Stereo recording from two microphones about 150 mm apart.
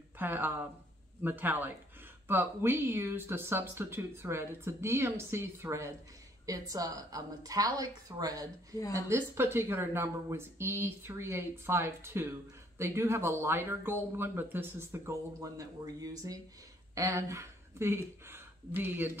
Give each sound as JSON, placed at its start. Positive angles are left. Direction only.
{"t": 0.2, "sound": "a woman's voice", "side_deg": -10}